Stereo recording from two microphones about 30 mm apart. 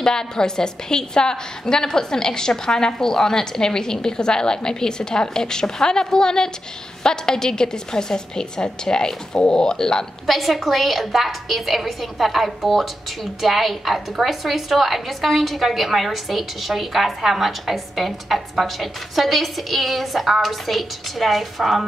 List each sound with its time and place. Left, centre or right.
0.0 s a woman's voice: left
10.2 s a woman's voice: centre